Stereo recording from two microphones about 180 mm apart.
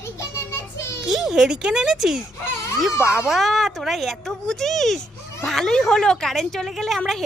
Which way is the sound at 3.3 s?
Centre (ahead or behind).